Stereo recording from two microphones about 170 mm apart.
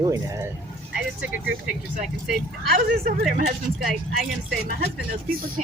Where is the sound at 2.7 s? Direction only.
65° right (ahead or behind).